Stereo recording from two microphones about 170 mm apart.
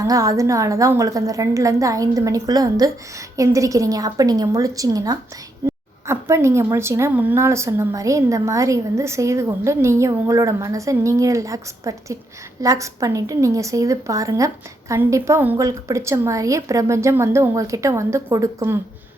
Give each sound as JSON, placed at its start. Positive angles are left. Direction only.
{"t": 0.0, "sound": "a woman's voice", "side_deg": -20}